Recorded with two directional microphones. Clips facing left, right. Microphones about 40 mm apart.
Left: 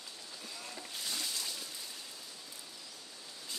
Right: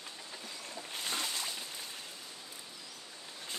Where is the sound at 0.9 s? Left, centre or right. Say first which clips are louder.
Right 4 dB; right.